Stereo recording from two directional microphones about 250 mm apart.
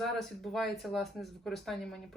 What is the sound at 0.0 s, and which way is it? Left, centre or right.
Speech, centre.